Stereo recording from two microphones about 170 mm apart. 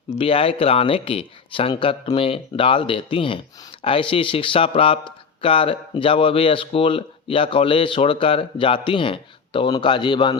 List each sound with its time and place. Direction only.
0.2 s speech: 30° left (ahead or behind)